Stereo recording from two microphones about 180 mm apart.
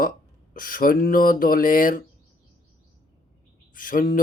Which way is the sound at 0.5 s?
50° left (ahead or behind).